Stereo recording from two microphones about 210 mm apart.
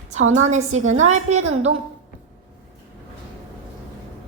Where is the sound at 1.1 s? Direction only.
35° right (ahead or behind).